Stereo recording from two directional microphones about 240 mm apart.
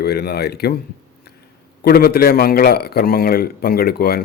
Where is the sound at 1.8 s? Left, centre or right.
Left.